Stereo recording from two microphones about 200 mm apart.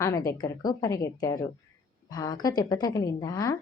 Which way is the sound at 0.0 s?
15° left (ahead or behind).